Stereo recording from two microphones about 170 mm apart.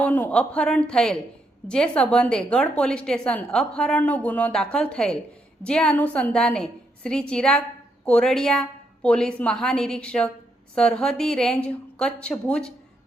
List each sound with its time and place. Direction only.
0.0 s a woman's voice: 10° left (ahead or behind)